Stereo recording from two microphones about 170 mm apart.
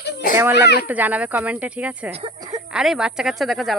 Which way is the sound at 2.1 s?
35° right (ahead or behind).